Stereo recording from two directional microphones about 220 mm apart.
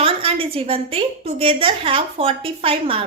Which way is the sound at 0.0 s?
25° right (ahead or behind).